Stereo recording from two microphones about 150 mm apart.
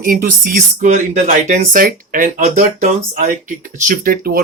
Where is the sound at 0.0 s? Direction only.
70° right (ahead or behind).